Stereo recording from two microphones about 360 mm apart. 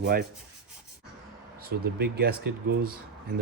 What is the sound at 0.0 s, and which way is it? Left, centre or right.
Speech, right.